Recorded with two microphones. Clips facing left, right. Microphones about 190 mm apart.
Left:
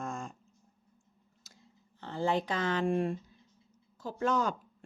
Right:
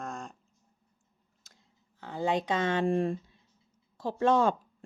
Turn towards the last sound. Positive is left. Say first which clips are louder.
# right 6 dB
turn(degrees=-30)  # may be behind; listen again after turning